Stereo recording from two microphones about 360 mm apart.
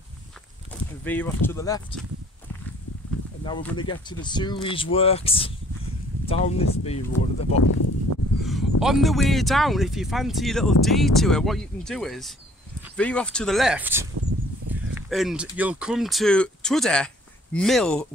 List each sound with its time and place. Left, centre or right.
1.0 s speech: centre
3.4 s speech: centre
8.4 s speech: centre